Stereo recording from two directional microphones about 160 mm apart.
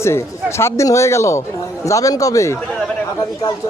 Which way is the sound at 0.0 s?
15° left (ahead or behind).